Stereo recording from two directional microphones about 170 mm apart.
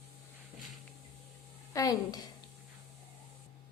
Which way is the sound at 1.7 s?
20° left (ahead or behind).